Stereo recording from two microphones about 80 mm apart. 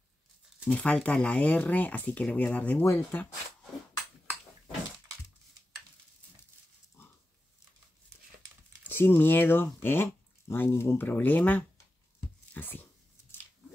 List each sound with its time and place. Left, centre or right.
0.7 s speech: centre
2.8 s speech: left
8.8 s speech: left